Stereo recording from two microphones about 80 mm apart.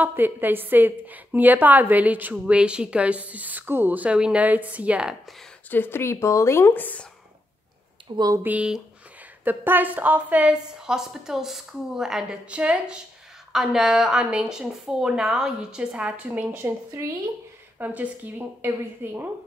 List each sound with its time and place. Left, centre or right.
0.0 s a woman's voice: right
5.7 s speech: left
8.4 s a woman's voice: right
10.9 s speech: centre
16.5 s speech: right
17.7 s a woman's voice: right